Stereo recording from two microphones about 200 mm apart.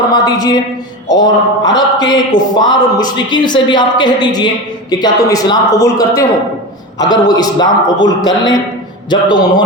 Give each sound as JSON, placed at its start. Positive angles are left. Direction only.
{"t": 0.1, "sound": "speech", "side_deg": 20}